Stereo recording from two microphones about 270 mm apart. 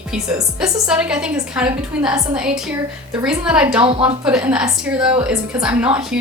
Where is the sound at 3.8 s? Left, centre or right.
Centre.